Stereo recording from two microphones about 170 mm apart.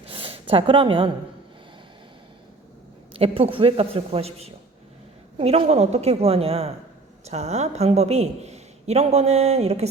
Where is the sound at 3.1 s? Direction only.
35° right (ahead or behind).